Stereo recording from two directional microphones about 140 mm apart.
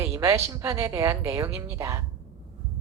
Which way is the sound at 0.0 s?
20° right (ahead or behind).